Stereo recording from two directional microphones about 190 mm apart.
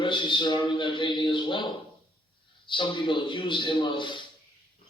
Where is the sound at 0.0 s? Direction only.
25° left (ahead or behind).